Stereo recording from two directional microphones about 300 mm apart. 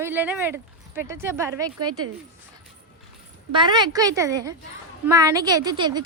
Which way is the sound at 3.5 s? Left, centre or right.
Centre.